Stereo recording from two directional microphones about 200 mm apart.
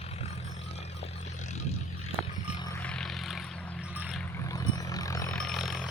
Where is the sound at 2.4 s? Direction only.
25° left (ahead or behind).